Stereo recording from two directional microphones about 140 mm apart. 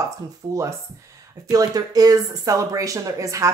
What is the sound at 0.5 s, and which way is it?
Speech, 20° right (ahead or behind).